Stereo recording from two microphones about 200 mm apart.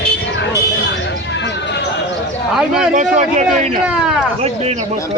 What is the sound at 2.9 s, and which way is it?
Speech, 35° right (ahead or behind).